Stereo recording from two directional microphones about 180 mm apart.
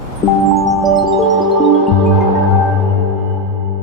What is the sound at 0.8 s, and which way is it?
Music, centre (ahead or behind).